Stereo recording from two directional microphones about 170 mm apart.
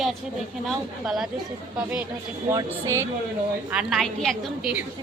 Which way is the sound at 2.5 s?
15° right (ahead or behind).